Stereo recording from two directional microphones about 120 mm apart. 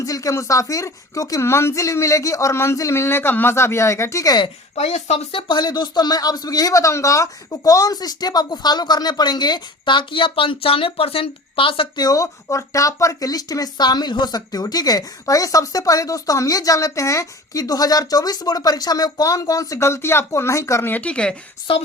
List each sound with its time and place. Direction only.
0.0 s speech: 30° left (ahead or behind)
4.7 s speech: 70° left (ahead or behind); by 12.0 s 45° left (ahead or behind)
12.0 s speech: 30° left (ahead or behind); by 21.3 s 10° left (ahead or behind)
21.7 s speech: 50° left (ahead or behind)